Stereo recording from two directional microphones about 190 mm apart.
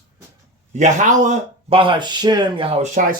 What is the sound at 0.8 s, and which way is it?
Speech, 40° right (ahead or behind).